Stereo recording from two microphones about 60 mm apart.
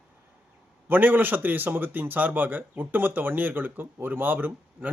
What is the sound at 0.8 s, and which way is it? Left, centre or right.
Speech, right.